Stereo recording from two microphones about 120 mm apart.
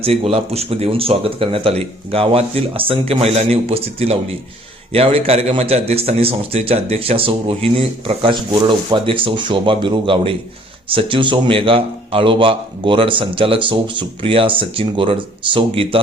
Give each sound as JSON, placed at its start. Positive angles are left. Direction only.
{"t": 0.0, "sound": "a man's voice", "side_deg": -55}